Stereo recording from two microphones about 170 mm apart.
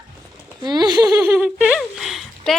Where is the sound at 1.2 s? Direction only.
5° right (ahead or behind).